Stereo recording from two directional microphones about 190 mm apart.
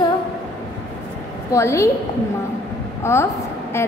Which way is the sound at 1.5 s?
15° left (ahead or behind).